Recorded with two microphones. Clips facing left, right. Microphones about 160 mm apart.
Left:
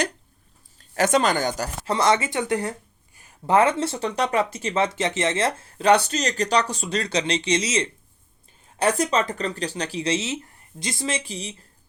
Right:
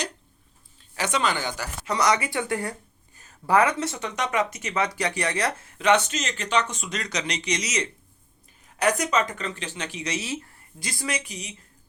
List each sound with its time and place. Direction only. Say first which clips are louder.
0.8 s speech: left 6 dB; 45° left (ahead or behind); by 2.7 s 20° left (ahead or behind)
3.2 s a sound: left 3 dB; 10° left (ahead or behind)
3.5 s speech: left 2 dB; 25° left (ahead or behind)